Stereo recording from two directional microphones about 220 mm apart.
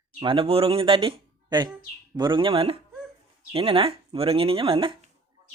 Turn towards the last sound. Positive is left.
turn(degrees=-25)  # may be behind; listen again after turning